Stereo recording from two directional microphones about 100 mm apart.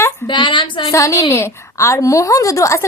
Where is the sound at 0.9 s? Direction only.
30° left (ahead or behind).